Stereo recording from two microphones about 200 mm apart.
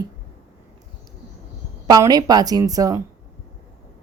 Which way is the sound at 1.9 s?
20° right (ahead or behind).